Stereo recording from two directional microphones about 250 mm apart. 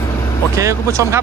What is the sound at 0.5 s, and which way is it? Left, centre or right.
Speech, centre.